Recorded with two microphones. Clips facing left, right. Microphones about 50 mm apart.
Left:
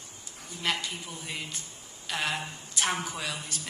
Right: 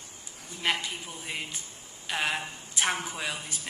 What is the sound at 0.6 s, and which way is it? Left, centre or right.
A woman's voice, right.